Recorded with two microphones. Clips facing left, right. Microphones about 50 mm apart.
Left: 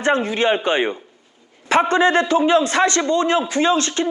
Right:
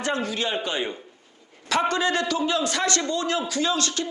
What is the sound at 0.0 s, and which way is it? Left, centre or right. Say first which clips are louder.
A man's voice: left 8 dB; left.